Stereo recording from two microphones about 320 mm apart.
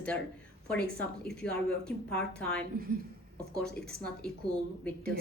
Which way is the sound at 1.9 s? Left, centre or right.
Centre.